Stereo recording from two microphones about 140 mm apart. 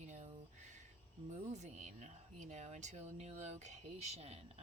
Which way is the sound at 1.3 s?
60° right (ahead or behind).